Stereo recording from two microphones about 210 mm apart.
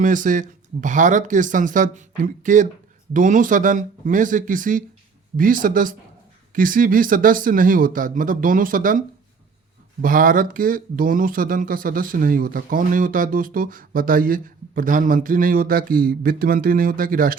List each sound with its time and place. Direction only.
0.0 s speech: 40° right (ahead or behind)